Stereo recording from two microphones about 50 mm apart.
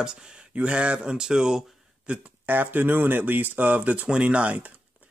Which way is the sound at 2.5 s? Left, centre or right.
Right.